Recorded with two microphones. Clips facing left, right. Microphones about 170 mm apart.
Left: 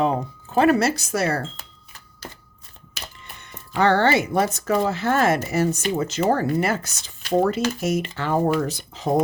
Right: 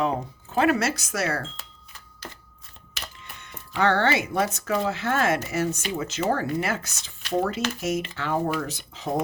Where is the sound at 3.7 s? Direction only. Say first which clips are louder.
Left 4 dB; 35° left (ahead or behind).